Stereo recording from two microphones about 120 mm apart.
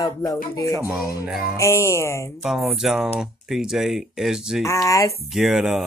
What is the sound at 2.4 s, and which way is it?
Speech, centre (ahead or behind).